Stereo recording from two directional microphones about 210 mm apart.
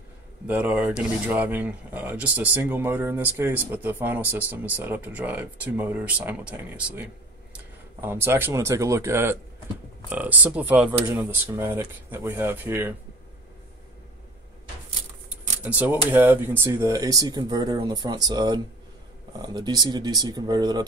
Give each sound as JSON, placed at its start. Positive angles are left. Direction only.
{"t": 0.5, "sound": "speech", "side_deg": -10}
{"t": 15.6, "sound": "speech", "side_deg": -10}